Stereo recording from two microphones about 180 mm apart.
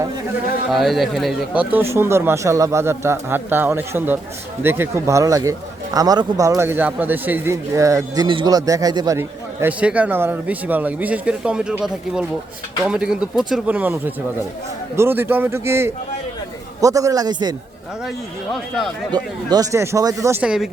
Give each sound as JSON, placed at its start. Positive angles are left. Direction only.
{"t": 0.7, "sound": "a man's voice", "side_deg": 0}
{"t": 19.1, "sound": "speech", "side_deg": -20}